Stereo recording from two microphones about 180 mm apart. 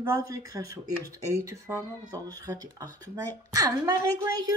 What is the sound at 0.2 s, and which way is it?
Speech, 20° right (ahead or behind).